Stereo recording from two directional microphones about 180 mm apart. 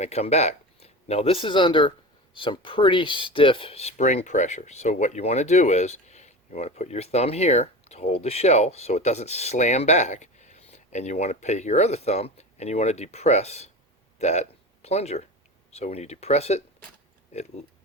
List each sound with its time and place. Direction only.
0.0 s speech: 35° left (ahead or behind)